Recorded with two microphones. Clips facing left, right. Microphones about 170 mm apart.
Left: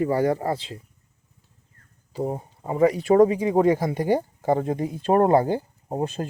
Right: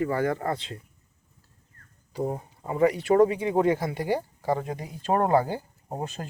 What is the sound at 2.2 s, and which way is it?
Speech, 20° left (ahead or behind).